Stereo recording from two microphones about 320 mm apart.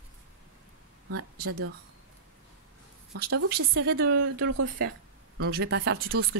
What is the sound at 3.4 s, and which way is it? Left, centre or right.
Speech, right.